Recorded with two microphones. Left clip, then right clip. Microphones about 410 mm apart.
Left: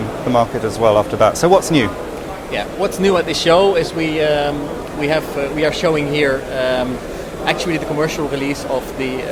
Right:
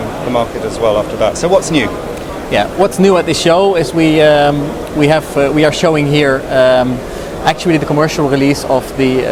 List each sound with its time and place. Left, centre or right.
0.3 s speech: left
2.5 s speech: right